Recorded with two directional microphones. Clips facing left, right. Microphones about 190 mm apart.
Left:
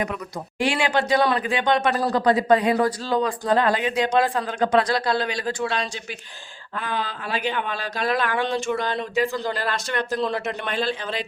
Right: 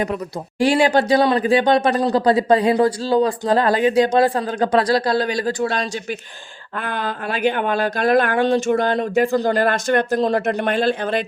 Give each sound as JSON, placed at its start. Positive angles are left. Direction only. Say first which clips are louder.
{"t": 0.6, "sound": "speech", "louder": "right 7 dB", "side_deg": -40}
{"t": 6.7, "sound": "speech", "louder": "right 3 dB", "side_deg": -55}